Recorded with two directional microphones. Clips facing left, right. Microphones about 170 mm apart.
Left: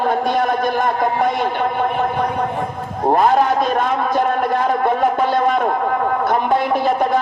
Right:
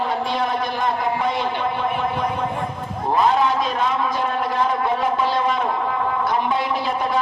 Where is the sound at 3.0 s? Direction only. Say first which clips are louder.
Left 4 dB; 50° left (ahead or behind).